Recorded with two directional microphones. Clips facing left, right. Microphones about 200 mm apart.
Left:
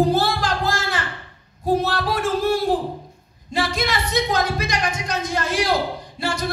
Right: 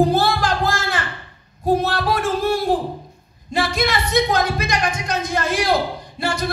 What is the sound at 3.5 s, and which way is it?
Speech, 55° right (ahead or behind).